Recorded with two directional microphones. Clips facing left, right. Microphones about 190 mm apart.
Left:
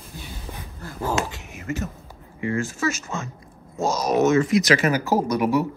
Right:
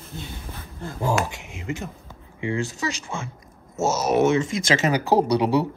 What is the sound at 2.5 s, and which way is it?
Speech, 15° right (ahead or behind).